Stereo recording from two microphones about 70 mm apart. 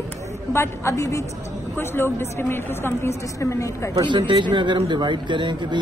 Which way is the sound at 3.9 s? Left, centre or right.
Right.